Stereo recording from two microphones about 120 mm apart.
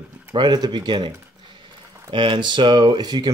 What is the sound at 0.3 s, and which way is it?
Speech, 35° right (ahead or behind).